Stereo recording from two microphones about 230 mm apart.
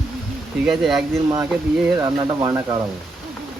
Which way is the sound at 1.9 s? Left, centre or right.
Centre.